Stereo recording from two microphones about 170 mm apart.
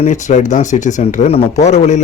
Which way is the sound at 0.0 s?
45° left (ahead or behind).